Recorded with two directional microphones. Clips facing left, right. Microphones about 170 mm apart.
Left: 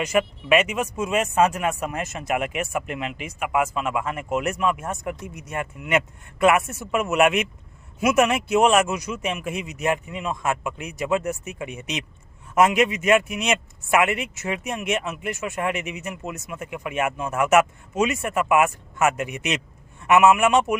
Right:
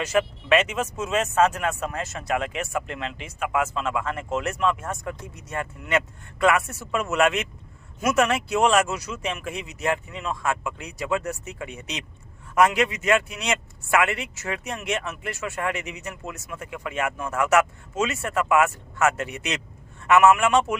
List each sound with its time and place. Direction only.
0.0 s speech: 15° left (ahead or behind)